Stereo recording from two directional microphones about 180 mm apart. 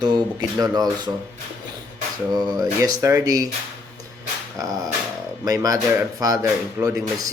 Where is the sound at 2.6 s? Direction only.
20° right (ahead or behind).